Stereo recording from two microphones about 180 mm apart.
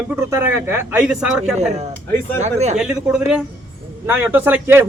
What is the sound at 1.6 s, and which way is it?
Speech, 40° right (ahead or behind).